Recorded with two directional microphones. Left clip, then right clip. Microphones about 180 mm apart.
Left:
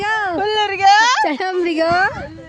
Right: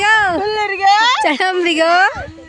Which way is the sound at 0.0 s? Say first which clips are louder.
Right 7 dB; centre (ahead or behind).